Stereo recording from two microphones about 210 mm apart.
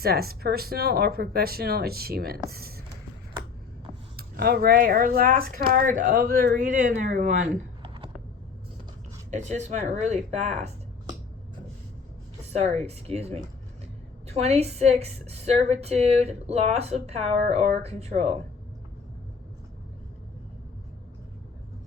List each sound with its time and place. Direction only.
0.0 s speech: 45° right (ahead or behind)
4.2 s speech: 50° right (ahead or behind)
7.8 s typing: 25° right (ahead or behind)
9.3 s a woman's voice: 35° right (ahead or behind)
12.4 s a woman's voice: 30° right (ahead or behind)